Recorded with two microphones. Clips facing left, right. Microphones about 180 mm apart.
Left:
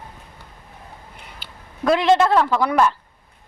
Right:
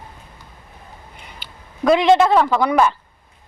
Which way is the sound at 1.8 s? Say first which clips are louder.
Right 3 dB; centre (ahead or behind).